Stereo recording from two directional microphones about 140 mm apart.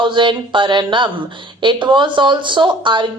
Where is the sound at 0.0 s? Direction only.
35° right (ahead or behind).